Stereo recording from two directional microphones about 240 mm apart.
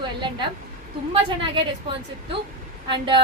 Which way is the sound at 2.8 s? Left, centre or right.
Right.